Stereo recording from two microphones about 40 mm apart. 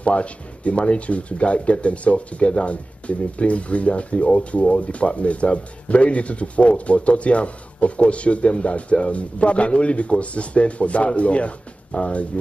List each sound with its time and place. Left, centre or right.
0.0 s speech: left